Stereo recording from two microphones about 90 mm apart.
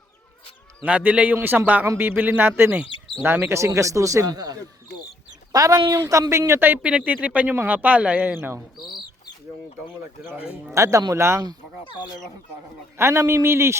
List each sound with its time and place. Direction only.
0.9 s a man's voice: 15° right (ahead or behind)
8.8 s speech: 55° left (ahead or behind)
10.3 s a man's voice: 15° right (ahead or behind)
10.8 s speech: 35° right (ahead or behind)
13.0 s speech: 30° right (ahead or behind)